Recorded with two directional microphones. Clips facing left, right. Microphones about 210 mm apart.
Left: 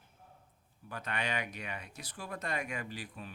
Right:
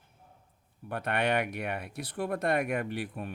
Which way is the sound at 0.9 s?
60° right (ahead or behind).